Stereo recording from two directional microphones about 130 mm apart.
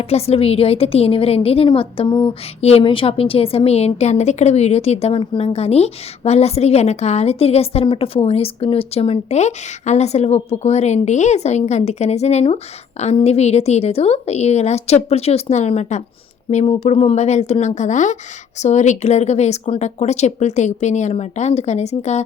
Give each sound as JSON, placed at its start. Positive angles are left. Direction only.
{"t": 0.0, "sound": "a woman's voice", "side_deg": 50}
{"t": 2.0, "sound": "a sound", "side_deg": 30}
{"t": 2.6, "sound": "a woman's voice", "side_deg": 55}